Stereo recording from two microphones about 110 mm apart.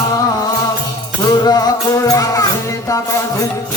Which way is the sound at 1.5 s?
35° left (ahead or behind).